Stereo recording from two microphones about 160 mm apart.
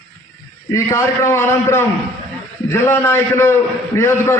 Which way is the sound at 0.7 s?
20° left (ahead or behind).